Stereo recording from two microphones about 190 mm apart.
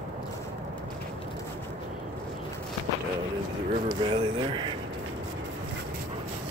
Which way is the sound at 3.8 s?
25° right (ahead or behind).